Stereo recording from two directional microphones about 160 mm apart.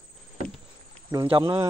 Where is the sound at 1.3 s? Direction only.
30° right (ahead or behind).